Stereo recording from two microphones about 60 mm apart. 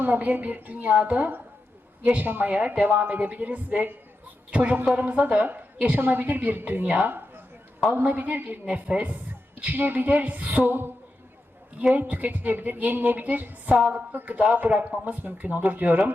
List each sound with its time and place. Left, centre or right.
0.0 s a woman's voice: right
11.9 s a woman's voice: right